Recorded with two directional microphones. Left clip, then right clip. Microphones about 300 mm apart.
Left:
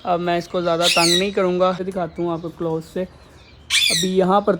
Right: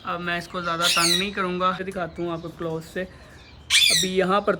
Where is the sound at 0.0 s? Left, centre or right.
Centre.